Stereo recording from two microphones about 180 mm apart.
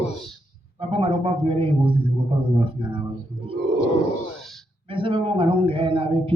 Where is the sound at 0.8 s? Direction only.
30° right (ahead or behind).